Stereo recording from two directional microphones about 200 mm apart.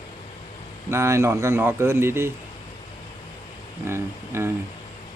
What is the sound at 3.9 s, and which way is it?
Speech, 10° right (ahead or behind).